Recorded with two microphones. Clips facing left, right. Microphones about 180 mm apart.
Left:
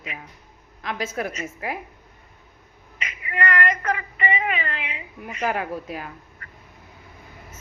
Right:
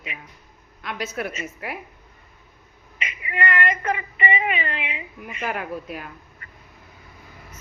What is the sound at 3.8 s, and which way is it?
A woman's voice, 15° right (ahead or behind).